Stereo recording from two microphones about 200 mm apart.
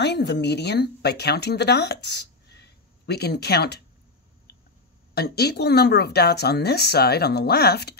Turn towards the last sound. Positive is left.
turn(degrees=55)  # may be behind; listen again after turning